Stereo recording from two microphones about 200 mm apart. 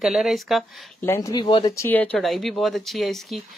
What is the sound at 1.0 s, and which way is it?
Speech, 15° left (ahead or behind).